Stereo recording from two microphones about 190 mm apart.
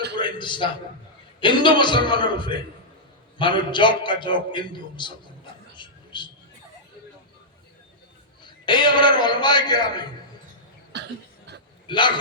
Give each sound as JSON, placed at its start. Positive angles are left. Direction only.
{"t": 0.2, "sound": "a sound", "side_deg": 25}
{"t": 1.4, "sound": "a man's voice", "side_deg": 25}
{"t": 5.7, "sound": "a sound", "side_deg": 25}
{"t": 8.4, "sound": "a man's voice", "side_deg": 25}
{"t": 10.9, "sound": "cough", "side_deg": -65}
{"t": 11.9, "sound": "a man's voice", "side_deg": 25}